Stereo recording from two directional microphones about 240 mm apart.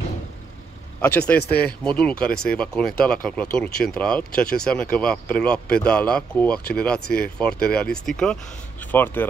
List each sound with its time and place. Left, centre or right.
1.0 s speech: centre
1.4 s speech: left
1.9 s speech: centre